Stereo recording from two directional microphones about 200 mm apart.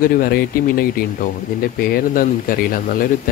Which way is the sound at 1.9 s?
45° left (ahead or behind).